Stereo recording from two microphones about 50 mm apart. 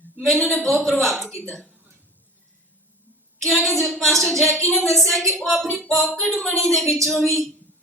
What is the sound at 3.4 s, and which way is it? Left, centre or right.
A man's voice, centre.